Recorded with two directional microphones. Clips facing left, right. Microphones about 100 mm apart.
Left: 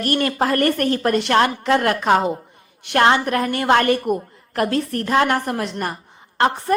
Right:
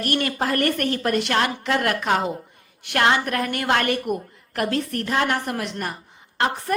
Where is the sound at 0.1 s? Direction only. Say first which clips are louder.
Left 4 dB; 40° left (ahead or behind).